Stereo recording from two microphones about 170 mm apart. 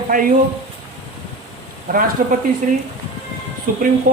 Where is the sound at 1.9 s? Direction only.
50° right (ahead or behind).